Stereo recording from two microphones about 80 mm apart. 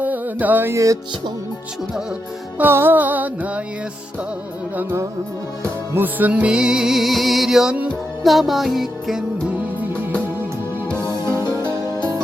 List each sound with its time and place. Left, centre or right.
0.0 s music: right
0.7 s music: right
2.6 s music: right
5.6 s music: right; by 9.2 s centre
11.3 s music: left